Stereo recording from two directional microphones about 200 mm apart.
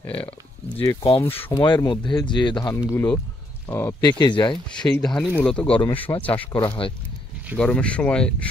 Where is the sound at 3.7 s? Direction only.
10° left (ahead or behind).